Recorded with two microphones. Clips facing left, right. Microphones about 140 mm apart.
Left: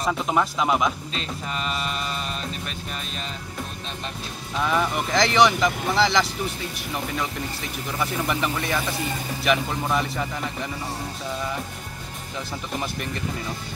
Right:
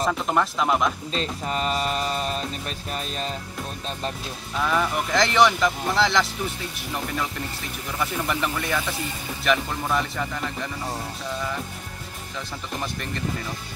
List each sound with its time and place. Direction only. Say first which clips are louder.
0.0 s speech: even; centre (ahead or behind)
1.1 s music: right 4 dB; 35° right (ahead or behind)
4.6 s speech: even; 5° left (ahead or behind)
8.0 s speech: left 1 dB; centre (ahead or behind)